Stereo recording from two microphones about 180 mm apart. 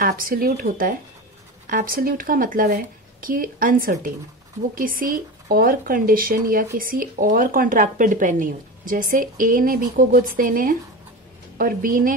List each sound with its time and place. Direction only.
0.0 s speech: 50° right (ahead or behind)